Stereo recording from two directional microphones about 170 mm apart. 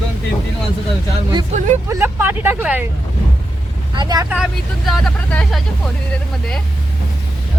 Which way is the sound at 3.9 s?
25° right (ahead or behind).